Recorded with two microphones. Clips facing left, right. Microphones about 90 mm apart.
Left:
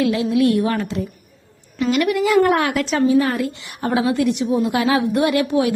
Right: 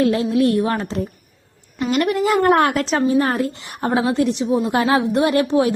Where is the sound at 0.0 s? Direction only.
40° right (ahead or behind).